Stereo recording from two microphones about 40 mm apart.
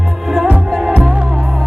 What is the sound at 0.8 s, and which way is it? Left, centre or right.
Music, right.